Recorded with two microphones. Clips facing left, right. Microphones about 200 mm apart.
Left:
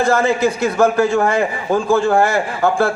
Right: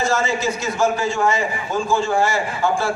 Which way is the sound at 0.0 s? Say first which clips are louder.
Left 6 dB; 60° left (ahead or behind).